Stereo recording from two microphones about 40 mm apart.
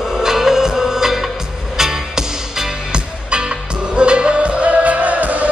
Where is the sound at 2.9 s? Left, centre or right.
Right.